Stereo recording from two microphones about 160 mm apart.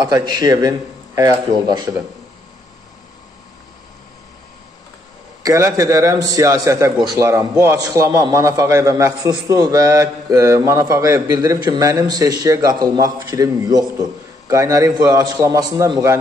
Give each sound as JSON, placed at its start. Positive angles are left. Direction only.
{"t": 0.0, "sound": "a man's voice", "side_deg": -25}
{"t": 5.4, "sound": "a man's voice", "side_deg": -20}